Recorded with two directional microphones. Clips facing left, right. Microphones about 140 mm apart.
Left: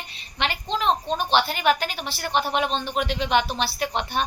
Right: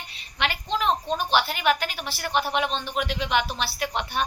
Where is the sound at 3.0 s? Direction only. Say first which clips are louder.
Left 3 dB; 5° right (ahead or behind).